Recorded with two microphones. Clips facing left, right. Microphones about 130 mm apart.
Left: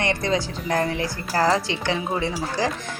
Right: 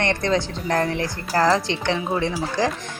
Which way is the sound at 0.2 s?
55° right (ahead or behind).